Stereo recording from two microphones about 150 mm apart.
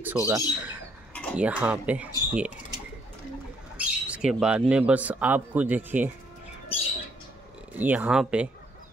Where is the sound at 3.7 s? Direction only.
10° right (ahead or behind).